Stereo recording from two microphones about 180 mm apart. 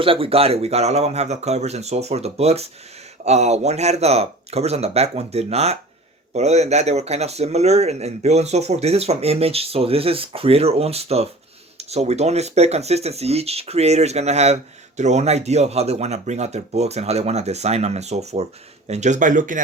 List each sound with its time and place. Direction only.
0.0 s speech: 30° right (ahead or behind); by 19.6 s 45° right (ahead or behind)